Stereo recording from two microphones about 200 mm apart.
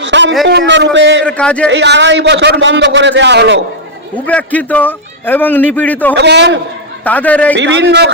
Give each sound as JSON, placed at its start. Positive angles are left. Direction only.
{"t": 0.0, "sound": "a sound", "side_deg": -65}
{"t": 0.4, "sound": "a man's voice", "side_deg": -60}
{"t": 1.2, "sound": "a man's voice", "side_deg": 5}
{"t": 1.6, "sound": "a man's voice", "side_deg": -60}
{"t": 4.3, "sound": "a man's voice", "side_deg": 5}
{"t": 6.1, "sound": "a man's voice", "side_deg": -60}
{"t": 7.0, "sound": "a man's voice", "side_deg": 10}
{"t": 7.5, "sound": "a man's voice", "side_deg": -60}